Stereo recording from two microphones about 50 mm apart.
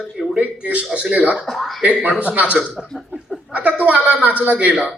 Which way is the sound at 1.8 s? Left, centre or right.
Right.